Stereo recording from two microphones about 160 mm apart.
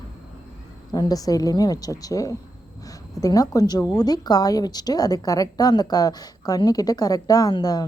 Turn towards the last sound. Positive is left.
turn(degrees=25)  # may be behind; listen again after turning